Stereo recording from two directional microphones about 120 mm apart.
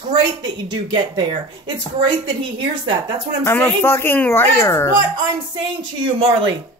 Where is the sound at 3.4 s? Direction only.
20° left (ahead or behind).